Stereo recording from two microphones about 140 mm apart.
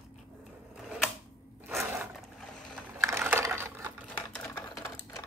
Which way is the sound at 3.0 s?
20° right (ahead or behind).